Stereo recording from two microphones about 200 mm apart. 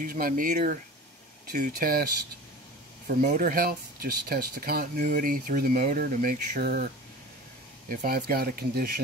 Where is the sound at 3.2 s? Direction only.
40° right (ahead or behind).